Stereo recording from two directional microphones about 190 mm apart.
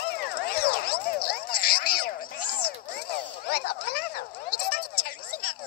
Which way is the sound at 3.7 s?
55° left (ahead or behind).